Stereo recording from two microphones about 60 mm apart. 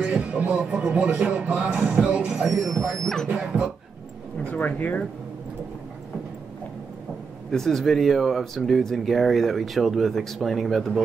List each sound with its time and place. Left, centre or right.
0.0 s music: centre
0.3 s music: right
2.4 s speech: centre
3.3 s dog: centre
4.5 s speech: left
7.5 s speech: centre